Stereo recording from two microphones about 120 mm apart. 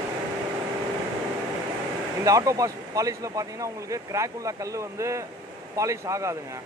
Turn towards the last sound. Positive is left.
turn(degrees=-25)  # may be behind; listen again after turning